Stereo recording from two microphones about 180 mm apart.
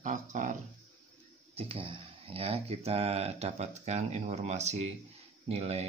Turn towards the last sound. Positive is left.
turn(degrees=-35)  # may be behind; listen again after turning